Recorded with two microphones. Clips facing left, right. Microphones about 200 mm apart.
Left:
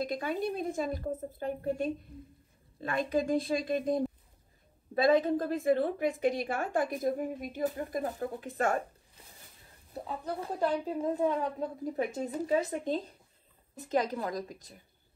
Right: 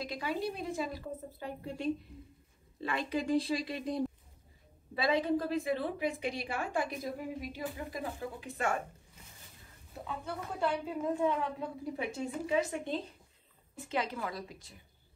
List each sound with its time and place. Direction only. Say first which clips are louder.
0.0 s a woman's voice: left 3 dB; 50° left (ahead or behind)
9.9 s a woman's voice: left 4 dB; 35° left (ahead or behind)